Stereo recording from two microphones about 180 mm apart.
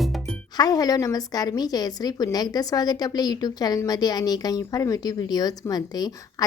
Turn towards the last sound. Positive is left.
turn(degrees=20)  # may be behind; listen again after turning